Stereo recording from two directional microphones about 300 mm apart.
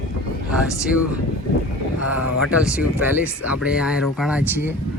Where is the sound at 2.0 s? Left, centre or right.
Left.